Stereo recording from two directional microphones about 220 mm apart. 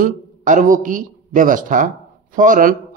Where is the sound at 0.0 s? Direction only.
35° right (ahead or behind).